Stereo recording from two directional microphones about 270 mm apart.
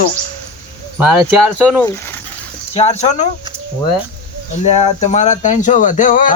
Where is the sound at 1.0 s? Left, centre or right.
Centre.